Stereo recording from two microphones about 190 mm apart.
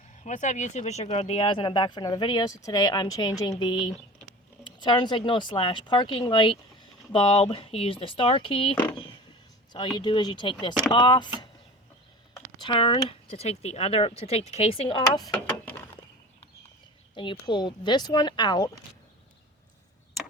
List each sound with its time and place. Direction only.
0.2 s speech: 40° left (ahead or behind)
8.7 s speech: 10° left (ahead or behind)
10.0 s speech: 25° left (ahead or behind)
12.5 s speech: 25° left (ahead or behind)
15.3 s a sound: 5° left (ahead or behind)
17.2 s speech: 25° left (ahead or behind)